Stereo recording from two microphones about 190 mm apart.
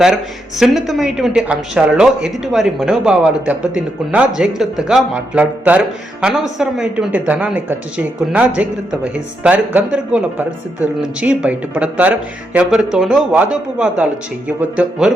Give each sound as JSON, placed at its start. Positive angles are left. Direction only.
{"t": 0.0, "sound": "a woman's voice", "side_deg": 0}